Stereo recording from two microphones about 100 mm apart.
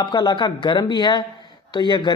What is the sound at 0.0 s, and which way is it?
Speech, 45° left (ahead or behind).